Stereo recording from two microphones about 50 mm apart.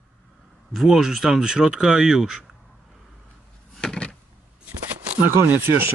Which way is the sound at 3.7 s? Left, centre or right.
Centre.